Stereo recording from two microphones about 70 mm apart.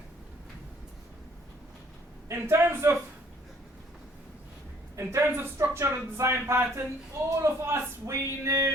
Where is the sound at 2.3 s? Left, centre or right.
Right.